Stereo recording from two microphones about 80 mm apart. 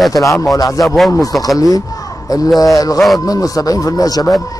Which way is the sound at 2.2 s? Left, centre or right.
Left.